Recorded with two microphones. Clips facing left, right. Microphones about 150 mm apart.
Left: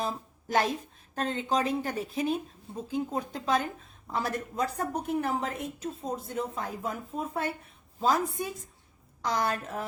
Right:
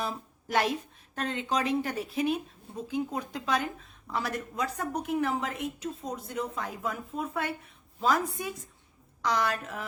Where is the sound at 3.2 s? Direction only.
40° left (ahead or behind).